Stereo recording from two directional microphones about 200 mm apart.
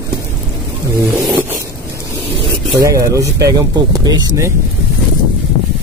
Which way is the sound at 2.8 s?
15° right (ahead or behind).